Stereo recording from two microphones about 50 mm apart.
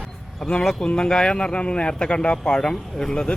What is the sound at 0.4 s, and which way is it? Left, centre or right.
Speech, centre.